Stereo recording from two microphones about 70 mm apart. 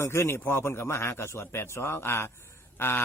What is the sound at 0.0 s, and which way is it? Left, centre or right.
A man's voice, left.